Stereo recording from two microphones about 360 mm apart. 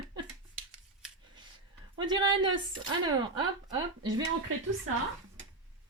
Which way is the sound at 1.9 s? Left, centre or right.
Centre.